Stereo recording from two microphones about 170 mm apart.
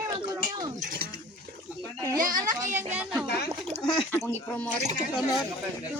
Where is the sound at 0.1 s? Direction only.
25° right (ahead or behind).